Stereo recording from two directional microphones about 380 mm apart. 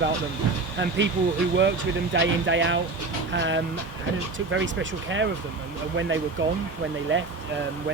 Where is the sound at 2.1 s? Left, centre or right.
Right.